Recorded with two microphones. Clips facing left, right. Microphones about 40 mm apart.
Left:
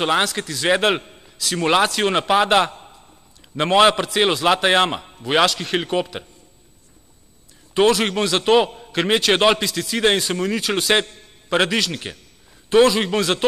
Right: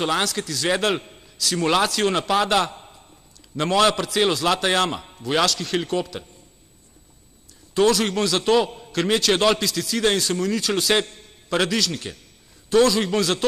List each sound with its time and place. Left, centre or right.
0.0 s a man's voice: centre
2.7 s a sound: centre
3.5 s a man's voice: left
7.7 s a man's voice: left